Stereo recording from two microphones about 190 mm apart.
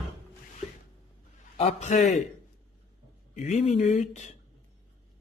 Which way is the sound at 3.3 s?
40° left (ahead or behind).